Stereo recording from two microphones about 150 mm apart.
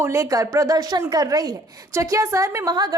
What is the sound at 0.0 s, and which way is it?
A woman's voice, 20° right (ahead or behind).